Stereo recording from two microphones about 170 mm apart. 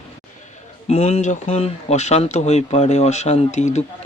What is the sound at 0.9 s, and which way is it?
Speech, 35° left (ahead or behind).